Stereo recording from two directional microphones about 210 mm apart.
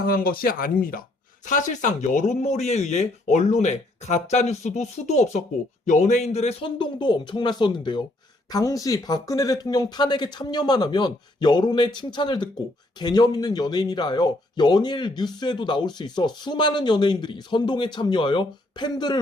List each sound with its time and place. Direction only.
0.0 s speech: 45° left (ahead or behind); by 19.2 s 20° left (ahead or behind)